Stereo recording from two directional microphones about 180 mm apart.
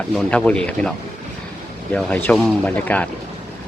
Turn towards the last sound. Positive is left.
turn(degrees=10)  # may be behind; listen again after turning